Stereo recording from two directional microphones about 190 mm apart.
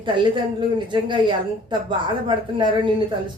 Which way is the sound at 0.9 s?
25° right (ahead or behind).